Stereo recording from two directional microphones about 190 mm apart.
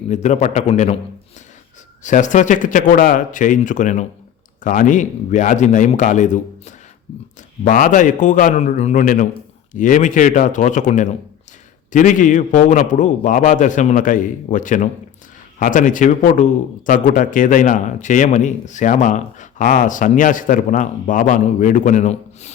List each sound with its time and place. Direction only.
0.1 s a man's voice: 35° left (ahead or behind)
2.0 s a man's voice: 40° left (ahead or behind)